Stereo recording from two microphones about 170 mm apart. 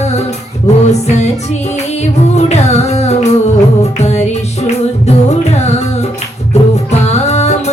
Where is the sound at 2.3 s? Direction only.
40° left (ahead or behind).